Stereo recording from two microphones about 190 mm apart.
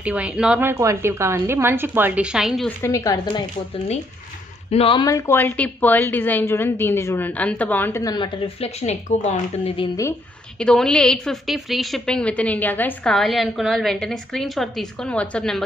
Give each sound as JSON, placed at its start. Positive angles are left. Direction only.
{"t": 0.0, "sound": "a woman's voice", "side_deg": -5}
{"t": 2.8, "sound": "a woman's voice", "side_deg": 15}
{"t": 4.6, "sound": "a woman's voice", "side_deg": 30}
{"t": 10.6, "sound": "a woman's voice", "side_deg": 5}